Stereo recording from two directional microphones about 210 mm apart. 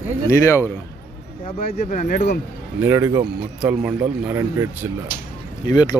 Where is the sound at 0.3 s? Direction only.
15° left (ahead or behind).